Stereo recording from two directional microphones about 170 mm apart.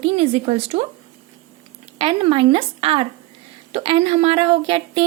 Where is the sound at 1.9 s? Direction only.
35° right (ahead or behind).